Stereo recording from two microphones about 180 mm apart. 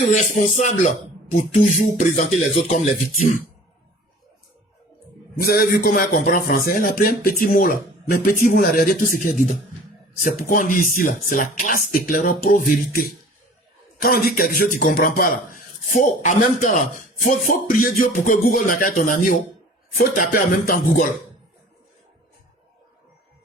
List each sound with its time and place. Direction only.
0.1 s a man's voice: 45° left (ahead or behind)
5.4 s a man's voice: 55° left (ahead or behind)
10.2 s a man's voice: 45° left (ahead or behind)